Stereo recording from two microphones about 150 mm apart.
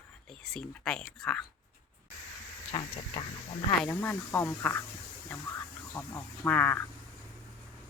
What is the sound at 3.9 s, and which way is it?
Speech, 15° left (ahead or behind).